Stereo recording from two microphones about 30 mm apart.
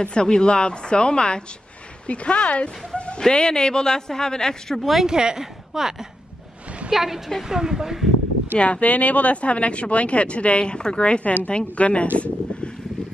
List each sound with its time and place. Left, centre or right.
0.0 s a woman's voice: left
3.2 s a woman's voice: left
4.7 s a woman's voice: centre
5.0 s a woman's voice: right
8.5 s speech: left